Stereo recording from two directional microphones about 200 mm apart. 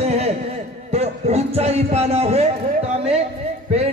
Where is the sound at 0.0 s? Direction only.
30° right (ahead or behind).